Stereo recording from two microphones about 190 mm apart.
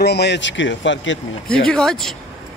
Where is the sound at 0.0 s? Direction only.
60° left (ahead or behind); by 1.2 s 75° left (ahead or behind).